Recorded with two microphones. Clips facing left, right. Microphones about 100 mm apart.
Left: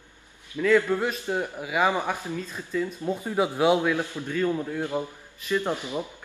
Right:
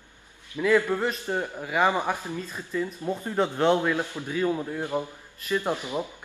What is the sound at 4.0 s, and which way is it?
Speech, 15° right (ahead or behind).